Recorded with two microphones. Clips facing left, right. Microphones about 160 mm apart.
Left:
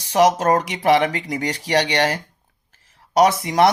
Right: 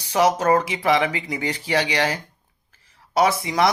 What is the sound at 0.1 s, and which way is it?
Speech, 35° left (ahead or behind).